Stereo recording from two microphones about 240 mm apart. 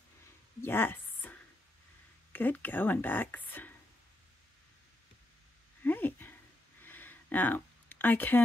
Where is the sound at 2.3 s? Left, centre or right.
Centre.